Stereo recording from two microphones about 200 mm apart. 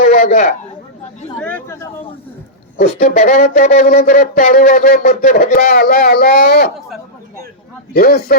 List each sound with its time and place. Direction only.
0.0 s a sound: 35° left (ahead or behind)
1.4 s speech: 5° left (ahead or behind)
2.7 s speech: 40° left (ahead or behind)
7.9 s speech: 50° left (ahead or behind)